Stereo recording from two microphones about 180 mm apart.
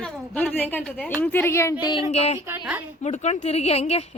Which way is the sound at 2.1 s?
35° left (ahead or behind).